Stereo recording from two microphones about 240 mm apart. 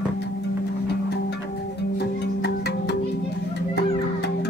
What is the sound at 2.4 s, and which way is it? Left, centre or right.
Music, left.